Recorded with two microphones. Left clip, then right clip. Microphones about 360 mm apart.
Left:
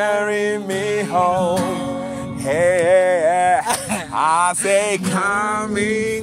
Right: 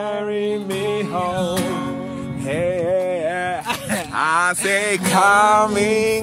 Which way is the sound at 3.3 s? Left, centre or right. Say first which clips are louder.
Left 7 dB; centre.